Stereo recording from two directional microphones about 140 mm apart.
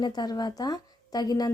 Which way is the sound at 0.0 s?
30° left (ahead or behind).